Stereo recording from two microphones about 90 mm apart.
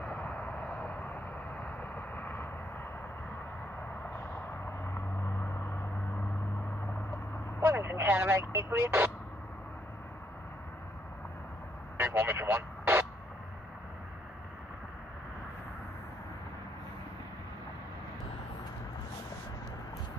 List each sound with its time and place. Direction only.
0.0 s vehicle: 15° left (ahead or behind)
4.8 s vehicle: 30° left (ahead or behind)
7.6 s speech: 25° right (ahead or behind)
12.0 s vehicle: 25° right (ahead or behind)